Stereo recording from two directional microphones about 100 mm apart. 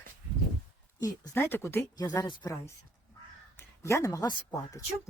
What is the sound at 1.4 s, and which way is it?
Speech, 20° left (ahead or behind).